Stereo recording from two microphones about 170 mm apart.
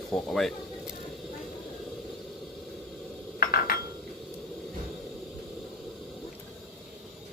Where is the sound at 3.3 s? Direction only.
60° left (ahead or behind).